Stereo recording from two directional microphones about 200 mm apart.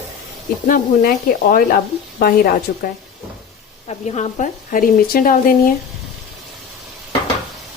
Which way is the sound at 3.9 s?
35° left (ahead or behind).